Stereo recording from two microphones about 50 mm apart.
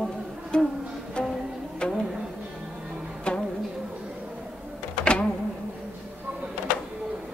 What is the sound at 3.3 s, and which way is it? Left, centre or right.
Music, centre.